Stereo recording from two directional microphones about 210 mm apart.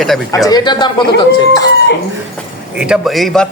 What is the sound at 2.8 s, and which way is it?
Speech, centre (ahead or behind).